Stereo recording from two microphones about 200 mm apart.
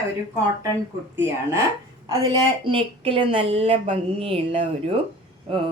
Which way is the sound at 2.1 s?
20° right (ahead or behind).